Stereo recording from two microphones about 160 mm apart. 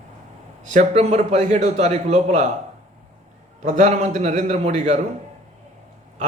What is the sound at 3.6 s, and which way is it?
A man's voice, 50° right (ahead or behind).